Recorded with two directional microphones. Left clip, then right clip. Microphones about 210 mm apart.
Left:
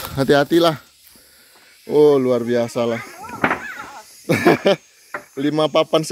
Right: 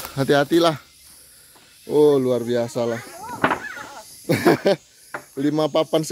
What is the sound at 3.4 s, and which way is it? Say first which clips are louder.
Fireworks: left 1 dB; 30° left (ahead or behind).